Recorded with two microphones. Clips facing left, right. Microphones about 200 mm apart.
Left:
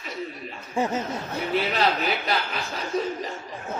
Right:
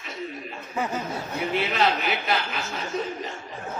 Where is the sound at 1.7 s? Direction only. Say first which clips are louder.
Even; 35° left (ahead or behind).